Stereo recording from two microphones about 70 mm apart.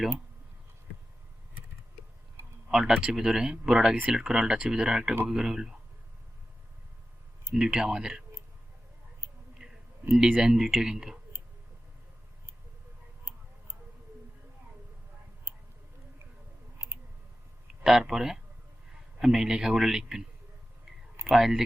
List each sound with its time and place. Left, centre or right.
2.6 s a sound: centre
3.0 s speech: centre
7.5 s speech: centre
9.6 s a sound: centre
10.3 s speech: centre
13.3 s tick-tock: right
16.7 s a sound: right
17.8 s speech: centre
21.2 s speech: centre